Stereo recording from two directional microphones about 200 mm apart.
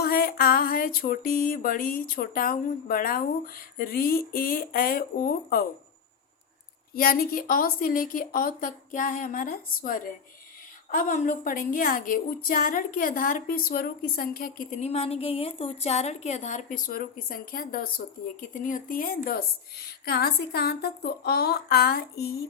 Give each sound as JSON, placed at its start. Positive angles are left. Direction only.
{"t": 0.0, "sound": "a woman's voice", "side_deg": 50}
{"t": 6.9, "sound": "a woman's voice", "side_deg": 45}